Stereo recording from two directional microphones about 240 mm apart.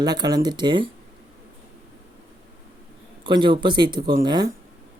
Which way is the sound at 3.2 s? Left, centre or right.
Centre.